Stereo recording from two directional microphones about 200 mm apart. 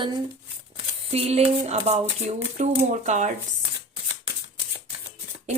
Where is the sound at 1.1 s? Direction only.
30° right (ahead or behind).